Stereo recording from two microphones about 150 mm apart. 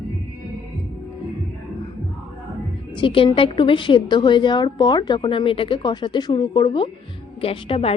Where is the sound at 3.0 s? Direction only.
35° left (ahead or behind).